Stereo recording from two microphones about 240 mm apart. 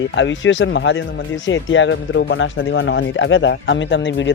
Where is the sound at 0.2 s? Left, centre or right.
Left.